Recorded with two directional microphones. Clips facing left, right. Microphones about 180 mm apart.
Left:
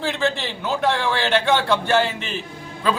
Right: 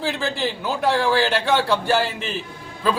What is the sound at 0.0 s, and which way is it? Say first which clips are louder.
A man's voice: left 1 dB; centre (ahead or behind).